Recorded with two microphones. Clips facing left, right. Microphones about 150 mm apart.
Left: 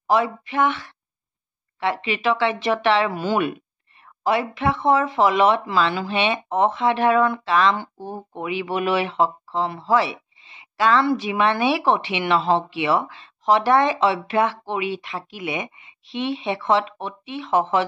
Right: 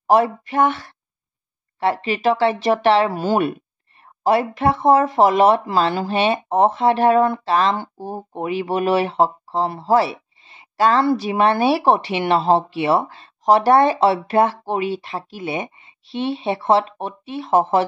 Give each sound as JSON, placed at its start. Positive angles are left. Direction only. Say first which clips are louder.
{"t": 0.0, "sound": "speech", "louder": "right 4 dB", "side_deg": -45}